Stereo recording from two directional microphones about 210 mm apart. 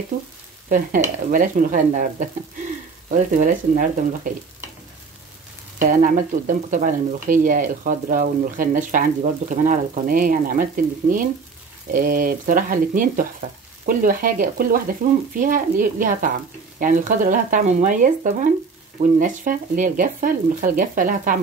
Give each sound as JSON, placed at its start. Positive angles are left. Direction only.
{"t": 0.7, "sound": "speech", "side_deg": -40}
{"t": 5.8, "sound": "speech", "side_deg": -40}
{"t": 11.9, "sound": "speech", "side_deg": -40}